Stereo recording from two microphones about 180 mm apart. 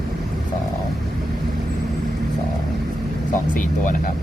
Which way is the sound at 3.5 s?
45° left (ahead or behind).